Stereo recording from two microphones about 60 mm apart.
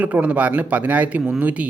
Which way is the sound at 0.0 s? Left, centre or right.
Right.